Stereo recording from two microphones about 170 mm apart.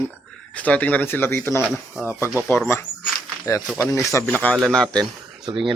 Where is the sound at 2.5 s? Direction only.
15° left (ahead or behind).